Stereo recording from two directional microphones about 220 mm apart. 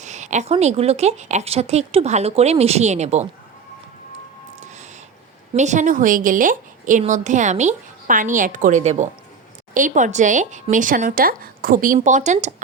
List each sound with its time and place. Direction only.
0.0 s speech: 30° right (ahead or behind)
5.5 s a woman's voice: 35° right (ahead or behind)